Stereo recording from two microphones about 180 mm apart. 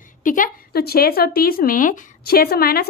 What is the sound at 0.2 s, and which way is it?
Speech, 45° left (ahead or behind).